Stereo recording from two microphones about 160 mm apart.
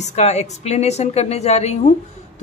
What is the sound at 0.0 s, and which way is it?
Speech, 45° left (ahead or behind).